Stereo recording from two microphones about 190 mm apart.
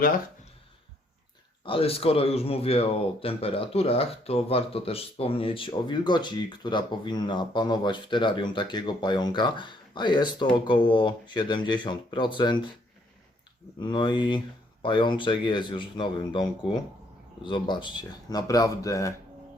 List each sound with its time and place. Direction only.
1.6 s speech: 30° left (ahead or behind)
13.7 s speech: 25° left (ahead or behind)